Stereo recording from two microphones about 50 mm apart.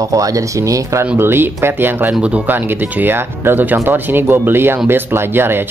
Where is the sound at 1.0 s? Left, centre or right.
Right.